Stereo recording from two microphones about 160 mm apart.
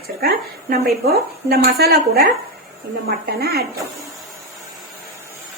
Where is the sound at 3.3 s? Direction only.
75° right (ahead or behind).